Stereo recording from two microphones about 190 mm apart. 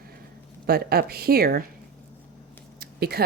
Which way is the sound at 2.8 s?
55° right (ahead or behind).